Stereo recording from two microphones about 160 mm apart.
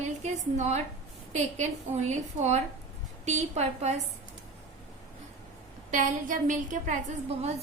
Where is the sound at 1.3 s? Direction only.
45° right (ahead or behind).